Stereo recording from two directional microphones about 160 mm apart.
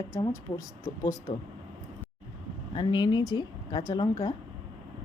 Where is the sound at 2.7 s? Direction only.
30° left (ahead or behind).